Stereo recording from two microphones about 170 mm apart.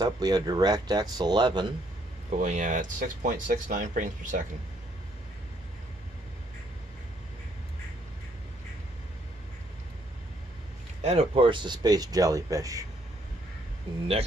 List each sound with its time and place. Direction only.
0.0 s speech: 25° right (ahead or behind)
2.3 s speech: 45° right (ahead or behind)
11.0 s speech: 40° right (ahead or behind); by 12.8 s 20° right (ahead or behind)